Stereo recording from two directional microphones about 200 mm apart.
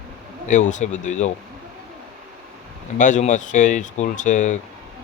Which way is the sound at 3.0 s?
40° left (ahead or behind).